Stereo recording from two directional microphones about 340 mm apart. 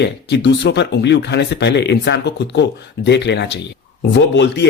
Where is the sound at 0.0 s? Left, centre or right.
Left.